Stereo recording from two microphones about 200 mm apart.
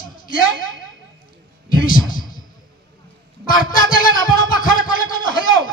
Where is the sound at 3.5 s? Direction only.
45° left (ahead or behind).